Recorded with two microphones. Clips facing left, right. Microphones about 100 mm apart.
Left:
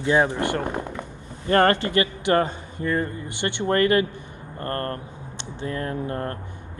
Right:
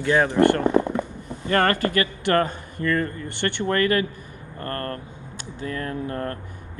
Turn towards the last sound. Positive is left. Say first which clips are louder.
# even
turn(degrees=30)  # may be behind; listen again after turning